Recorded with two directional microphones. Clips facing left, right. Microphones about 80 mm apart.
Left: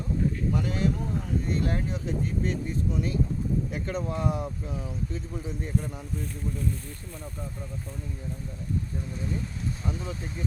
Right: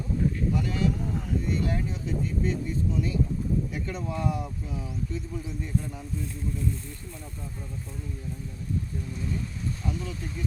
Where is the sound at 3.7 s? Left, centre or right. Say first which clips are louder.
Left 2 dB; left.